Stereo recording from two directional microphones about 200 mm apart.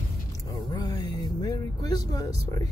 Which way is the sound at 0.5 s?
20° left (ahead or behind).